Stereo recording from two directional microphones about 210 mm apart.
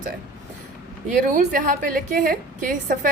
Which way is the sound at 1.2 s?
40° right (ahead or behind).